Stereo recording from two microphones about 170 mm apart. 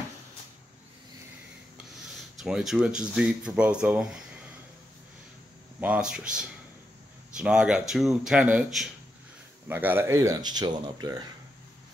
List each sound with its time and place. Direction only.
2.4 s speech: 5° right (ahead or behind)
5.8 s speech: 5° right (ahead or behind); by 11.2 s 25° right (ahead or behind)